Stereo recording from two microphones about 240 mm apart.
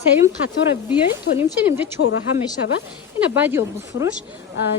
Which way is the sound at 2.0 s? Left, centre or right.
Left.